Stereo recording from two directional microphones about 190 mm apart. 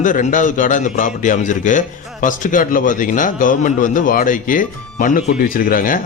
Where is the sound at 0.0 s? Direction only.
45° left (ahead or behind).